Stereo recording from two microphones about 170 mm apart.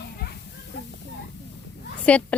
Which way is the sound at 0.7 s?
90° left.